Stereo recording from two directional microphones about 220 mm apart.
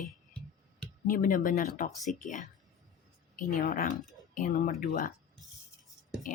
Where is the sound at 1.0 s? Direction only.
40° left (ahead or behind).